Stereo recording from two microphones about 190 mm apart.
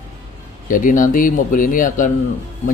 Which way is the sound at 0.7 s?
45° left (ahead or behind).